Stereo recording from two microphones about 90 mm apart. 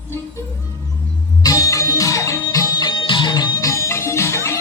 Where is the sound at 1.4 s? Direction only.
40° left (ahead or behind).